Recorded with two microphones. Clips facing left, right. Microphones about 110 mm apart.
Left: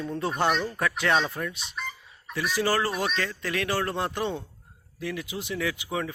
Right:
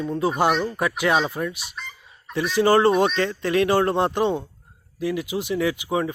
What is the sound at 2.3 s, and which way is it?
Speech, 20° right (ahead or behind).